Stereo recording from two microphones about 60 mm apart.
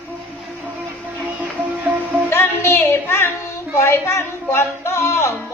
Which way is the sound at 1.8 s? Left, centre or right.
Right.